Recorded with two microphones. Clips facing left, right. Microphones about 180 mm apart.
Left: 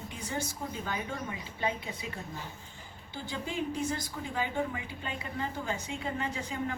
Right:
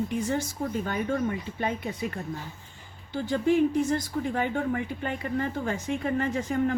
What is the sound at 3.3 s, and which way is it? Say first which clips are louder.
Speech: right 12 dB; 60° right (ahead or behind).